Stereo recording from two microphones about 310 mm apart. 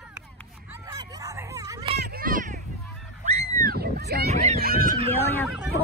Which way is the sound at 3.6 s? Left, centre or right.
Right.